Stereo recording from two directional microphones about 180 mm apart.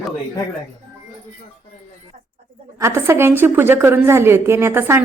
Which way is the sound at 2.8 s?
15° right (ahead or behind).